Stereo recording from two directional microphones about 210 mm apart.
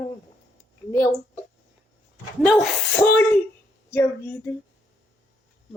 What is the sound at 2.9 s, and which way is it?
Speech, 10° left (ahead or behind).